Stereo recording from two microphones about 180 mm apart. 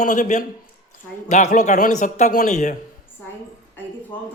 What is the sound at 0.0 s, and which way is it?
A man's voice, 40° left (ahead or behind).